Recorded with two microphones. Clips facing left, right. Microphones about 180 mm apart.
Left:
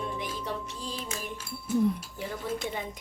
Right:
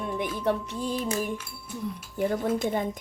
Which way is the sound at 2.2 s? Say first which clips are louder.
Right 9 dB; 50° right (ahead or behind).